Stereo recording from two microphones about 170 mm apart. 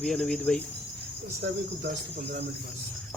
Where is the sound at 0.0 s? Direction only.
Centre (ahead or behind).